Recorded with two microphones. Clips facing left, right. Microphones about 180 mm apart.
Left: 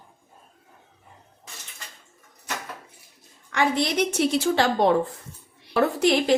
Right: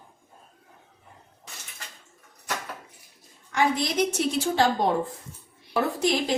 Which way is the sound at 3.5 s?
70° left (ahead or behind).